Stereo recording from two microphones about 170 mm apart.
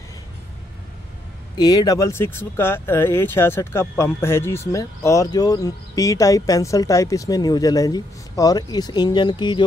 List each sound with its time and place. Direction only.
1.6 s speech: 25° left (ahead or behind)